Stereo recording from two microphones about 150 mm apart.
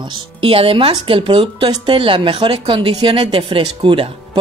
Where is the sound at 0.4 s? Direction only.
40° right (ahead or behind).